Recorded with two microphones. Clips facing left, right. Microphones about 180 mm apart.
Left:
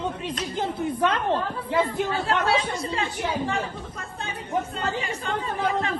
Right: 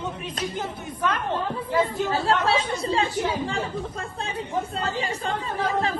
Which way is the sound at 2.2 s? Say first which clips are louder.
Right 1 dB; 30° right (ahead or behind).